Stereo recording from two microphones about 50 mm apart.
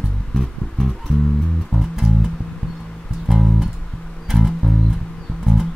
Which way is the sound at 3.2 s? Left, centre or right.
Centre.